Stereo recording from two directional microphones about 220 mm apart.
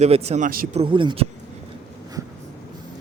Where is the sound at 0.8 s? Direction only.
20° right (ahead or behind).